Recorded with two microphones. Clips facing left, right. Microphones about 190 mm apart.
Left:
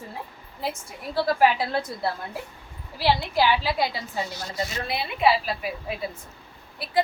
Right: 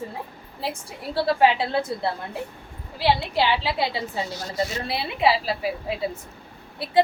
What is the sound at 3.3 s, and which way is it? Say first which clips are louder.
A woman's voice: even; 25° right (ahead or behind).